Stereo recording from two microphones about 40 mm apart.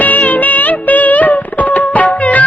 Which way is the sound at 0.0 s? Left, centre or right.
Left.